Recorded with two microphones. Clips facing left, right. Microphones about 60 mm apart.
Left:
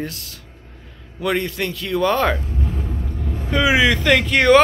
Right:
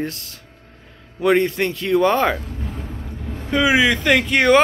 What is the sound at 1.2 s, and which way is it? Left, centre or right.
Speech, right.